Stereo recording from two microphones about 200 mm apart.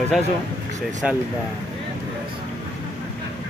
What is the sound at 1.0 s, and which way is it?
Speech, 5° right (ahead or behind).